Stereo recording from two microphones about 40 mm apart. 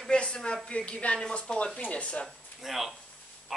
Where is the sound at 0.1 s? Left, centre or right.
Left.